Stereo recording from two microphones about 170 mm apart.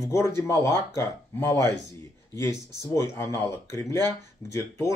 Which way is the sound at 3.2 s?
15° left (ahead or behind).